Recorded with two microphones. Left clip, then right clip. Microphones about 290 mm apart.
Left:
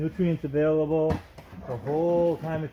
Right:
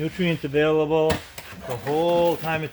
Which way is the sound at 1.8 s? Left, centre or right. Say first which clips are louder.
Right 3 dB; centre.